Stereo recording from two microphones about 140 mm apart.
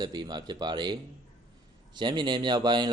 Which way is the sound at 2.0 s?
35° right (ahead or behind).